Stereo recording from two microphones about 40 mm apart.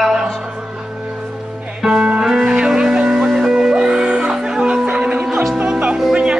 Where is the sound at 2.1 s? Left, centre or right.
Centre.